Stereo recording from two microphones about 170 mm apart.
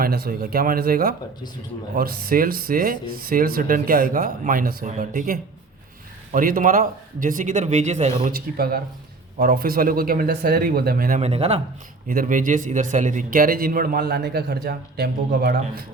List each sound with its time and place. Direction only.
0.0 s a man's voice: 60° right (ahead or behind); by 8.1 s 40° right (ahead or behind)
8.2 s a man's voice: 60° right (ahead or behind)
11.2 s speech: 35° right (ahead or behind)
12.0 s a man's voice: 55° right (ahead or behind)